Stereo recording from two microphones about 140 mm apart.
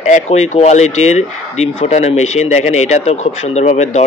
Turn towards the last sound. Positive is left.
turn(degrees=50)  # may be behind; listen again after turning